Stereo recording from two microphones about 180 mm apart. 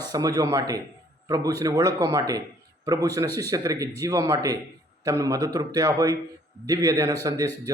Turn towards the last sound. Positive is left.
turn(degrees=-20)  # may be behind; listen again after turning